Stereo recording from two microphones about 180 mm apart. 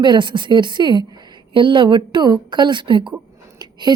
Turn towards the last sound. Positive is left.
turn(degrees=-25)  # may be behind; listen again after turning